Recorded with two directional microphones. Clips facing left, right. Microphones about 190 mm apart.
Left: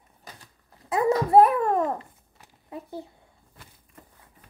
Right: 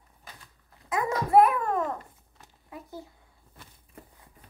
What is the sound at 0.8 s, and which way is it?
Babbling, 35° left (ahead or behind).